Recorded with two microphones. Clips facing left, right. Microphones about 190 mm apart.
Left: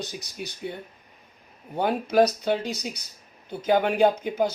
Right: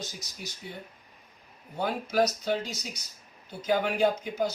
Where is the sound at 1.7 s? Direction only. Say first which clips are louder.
Left 6 dB; 60° left (ahead or behind).